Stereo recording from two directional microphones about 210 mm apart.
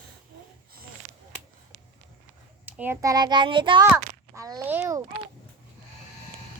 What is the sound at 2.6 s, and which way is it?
A child's voice, 10° right (ahead or behind).